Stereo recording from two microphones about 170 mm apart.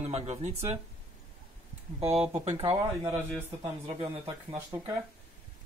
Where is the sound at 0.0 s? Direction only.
40° right (ahead or behind).